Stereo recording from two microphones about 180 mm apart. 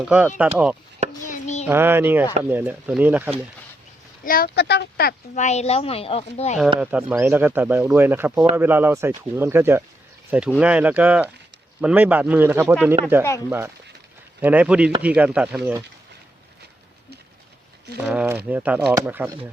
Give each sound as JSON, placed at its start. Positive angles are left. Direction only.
{"t": 0.0, "sound": "speech", "side_deg": -5}
{"t": 1.3, "sound": "a child's voice", "side_deg": 40}
{"t": 1.6, "sound": "speech", "side_deg": -10}
{"t": 4.2, "sound": "speech", "side_deg": 55}
{"t": 5.3, "sound": "a woman's voice", "side_deg": 40}
{"t": 6.7, "sound": "speech", "side_deg": -10}
{"t": 14.4, "sound": "speech", "side_deg": -10}
{"t": 17.9, "sound": "speech", "side_deg": -5}